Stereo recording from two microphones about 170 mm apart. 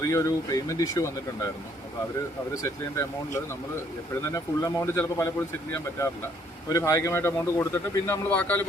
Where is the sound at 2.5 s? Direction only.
20° left (ahead or behind).